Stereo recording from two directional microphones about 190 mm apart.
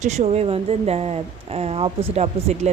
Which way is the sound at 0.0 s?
35° right (ahead or behind).